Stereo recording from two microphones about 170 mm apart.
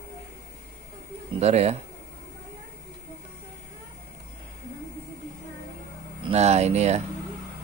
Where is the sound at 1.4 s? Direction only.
40° right (ahead or behind).